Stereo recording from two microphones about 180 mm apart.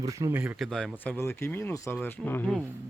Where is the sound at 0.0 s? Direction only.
20° right (ahead or behind).